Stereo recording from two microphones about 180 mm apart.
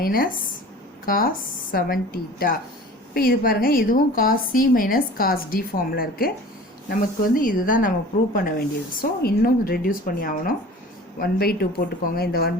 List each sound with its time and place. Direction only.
0.0 s speech: 55° left (ahead or behind)
3.2 s speech: 55° left (ahead or behind)